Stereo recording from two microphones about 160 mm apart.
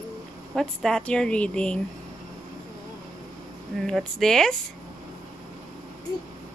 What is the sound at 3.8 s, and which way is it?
Speech, centre (ahead or behind).